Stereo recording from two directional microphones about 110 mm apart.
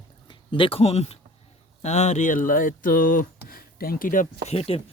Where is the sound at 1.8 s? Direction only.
85° left.